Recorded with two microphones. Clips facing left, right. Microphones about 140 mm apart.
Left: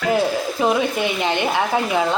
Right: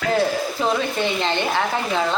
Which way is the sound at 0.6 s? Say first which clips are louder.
Left 3 dB; 10° left (ahead or behind).